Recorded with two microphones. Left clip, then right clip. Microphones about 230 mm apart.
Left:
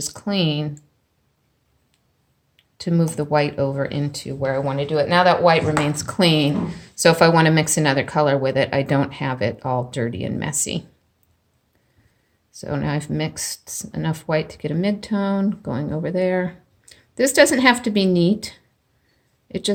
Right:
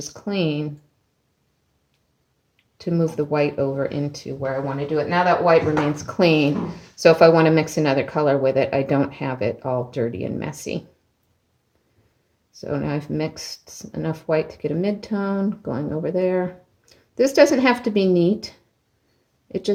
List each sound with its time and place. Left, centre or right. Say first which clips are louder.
0.2 s a woman's voice: left 1 dB; left
2.8 s speech: right 1 dB; left
6.1 s a woman's voice: right 2 dB; left
12.5 s a woman's voice: even; left
19.5 s a woman's voice: even; left